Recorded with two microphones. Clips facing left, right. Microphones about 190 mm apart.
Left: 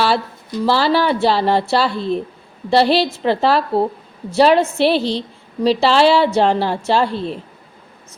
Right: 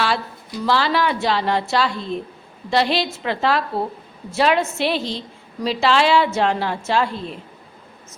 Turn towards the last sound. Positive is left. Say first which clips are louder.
# left 4 dB
turn(degrees=30)  # may be behind; listen again after turning